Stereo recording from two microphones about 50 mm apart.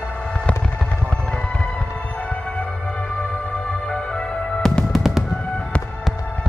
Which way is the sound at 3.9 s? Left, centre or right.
Centre.